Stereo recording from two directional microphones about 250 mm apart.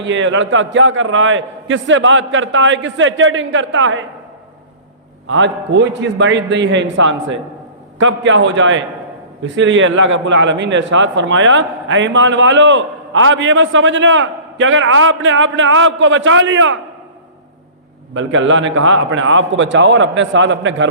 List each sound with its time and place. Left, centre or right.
0.0 s a man's voice: right
5.3 s a man's voice: right
18.1 s a man's voice: right